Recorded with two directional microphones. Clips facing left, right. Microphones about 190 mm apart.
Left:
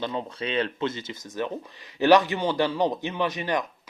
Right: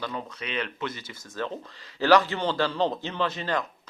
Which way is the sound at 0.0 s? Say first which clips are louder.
Left 4 dB; 25° left (ahead or behind).